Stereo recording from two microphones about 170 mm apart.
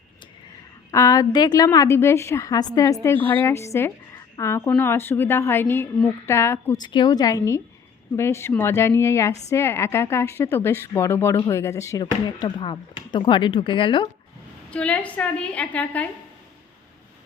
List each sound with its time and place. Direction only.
0.9 s a woman's voice: 20° left (ahead or behind)
6.7 s a woman's voice: 25° left (ahead or behind)
14.7 s a woman's voice: 5° left (ahead or behind)